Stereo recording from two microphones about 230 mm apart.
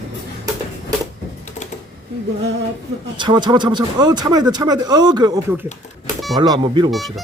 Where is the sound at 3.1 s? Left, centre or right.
Centre.